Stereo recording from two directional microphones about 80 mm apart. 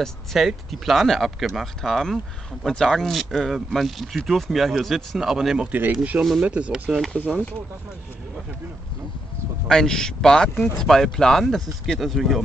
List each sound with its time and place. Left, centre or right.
0.0 s speech: centre
5.7 s speech: right
6.9 s speech: centre
9.7 s speech: centre